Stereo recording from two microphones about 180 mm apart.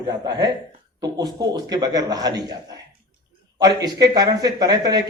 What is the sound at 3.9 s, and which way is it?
A man's voice, 20° right (ahead or behind).